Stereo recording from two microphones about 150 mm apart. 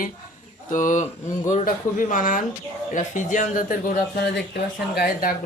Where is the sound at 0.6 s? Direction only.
60° left (ahead or behind).